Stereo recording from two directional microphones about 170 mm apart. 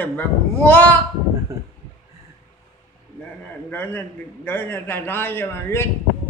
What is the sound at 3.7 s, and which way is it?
A man's voice, 15° left (ahead or behind).